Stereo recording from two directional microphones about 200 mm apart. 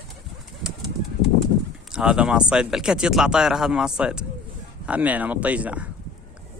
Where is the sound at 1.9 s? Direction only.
5° right (ahead or behind).